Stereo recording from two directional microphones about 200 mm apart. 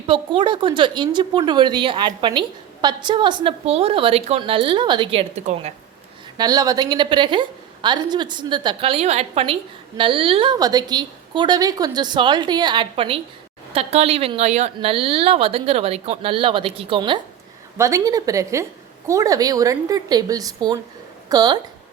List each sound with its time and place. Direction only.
0.1 s speech: 25° right (ahead or behind)
5.4 s speech: 35° right (ahead or behind)
6.3 s speech: 20° right (ahead or behind)
17.7 s a woman's voice: 15° right (ahead or behind)